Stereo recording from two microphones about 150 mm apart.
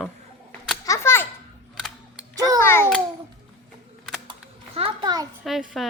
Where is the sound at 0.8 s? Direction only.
20° left (ahead or behind).